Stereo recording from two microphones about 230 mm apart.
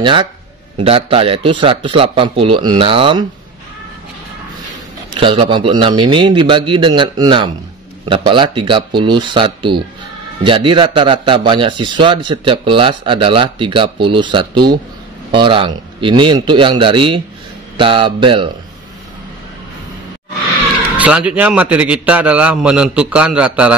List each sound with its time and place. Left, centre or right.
0.0 s speech: right
5.2 s speech: right
21.0 s a man's voice: centre